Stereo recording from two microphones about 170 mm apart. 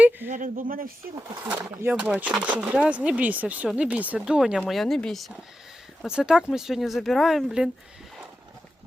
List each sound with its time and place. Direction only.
0.3 s speech: 50° right (ahead or behind)
1.5 s speech: 15° right (ahead or behind)